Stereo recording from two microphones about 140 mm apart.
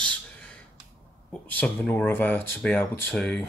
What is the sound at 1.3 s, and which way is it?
Speech, 10° left (ahead or behind).